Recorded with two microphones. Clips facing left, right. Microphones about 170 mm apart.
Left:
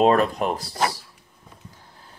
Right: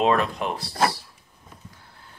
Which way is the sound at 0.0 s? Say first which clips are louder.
Left 4 dB; 45° left (ahead or behind).